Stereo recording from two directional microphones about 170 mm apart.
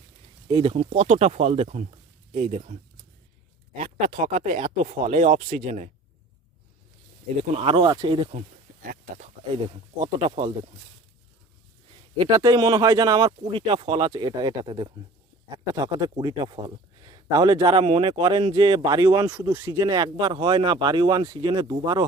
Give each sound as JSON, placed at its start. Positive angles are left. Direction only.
{"t": 0.4, "sound": "speech", "side_deg": -30}
{"t": 0.8, "sound": "speech", "side_deg": -40}
{"t": 3.8, "sound": "speech", "side_deg": -50}
{"t": 7.5, "sound": "speech", "side_deg": -35}
{"t": 8.4, "sound": "a sound", "side_deg": -50}
{"t": 9.6, "sound": "speech", "side_deg": -35}
{"t": 12.1, "sound": "speech", "side_deg": -25}
{"t": 19.3, "sound": "speech", "side_deg": -10}
{"t": 19.8, "sound": "speech", "side_deg": -25}